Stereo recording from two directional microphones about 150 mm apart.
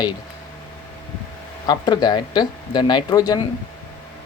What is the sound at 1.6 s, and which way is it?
Speech, 30° left (ahead or behind).